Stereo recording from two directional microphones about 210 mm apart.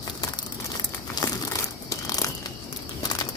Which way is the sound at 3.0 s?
20° left (ahead or behind).